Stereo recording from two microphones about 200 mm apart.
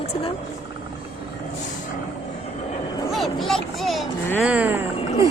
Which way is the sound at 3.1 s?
Centre (ahead or behind).